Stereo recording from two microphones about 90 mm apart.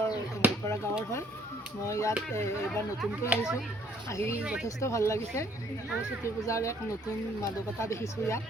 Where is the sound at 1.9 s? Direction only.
35° left (ahead or behind).